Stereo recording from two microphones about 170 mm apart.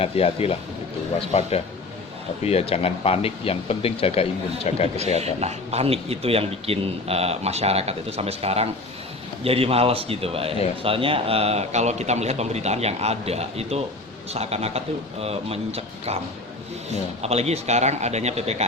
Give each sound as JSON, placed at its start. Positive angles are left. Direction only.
{"t": 0.0, "sound": "speech", "side_deg": 35}
{"t": 5.2, "sound": "speech", "side_deg": -40}